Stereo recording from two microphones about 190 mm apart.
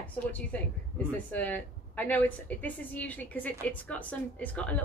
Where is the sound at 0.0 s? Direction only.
5° left (ahead or behind).